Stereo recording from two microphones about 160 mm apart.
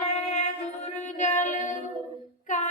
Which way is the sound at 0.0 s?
45° left (ahead or behind).